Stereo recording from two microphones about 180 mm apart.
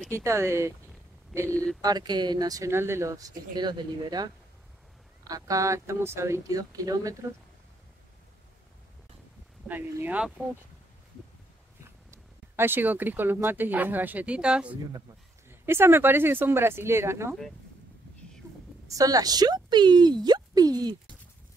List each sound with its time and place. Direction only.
0.2 s speech: 15° right (ahead or behind)
1.4 s speech: 10° left (ahead or behind)
1.8 s speech: 20° right (ahead or behind)
9.7 s speech: 10° right (ahead or behind)
12.1 s speech: 10° right (ahead or behind)
18.4 s a sound: 10° right (ahead or behind)
18.9 s speech: 20° right (ahead or behind)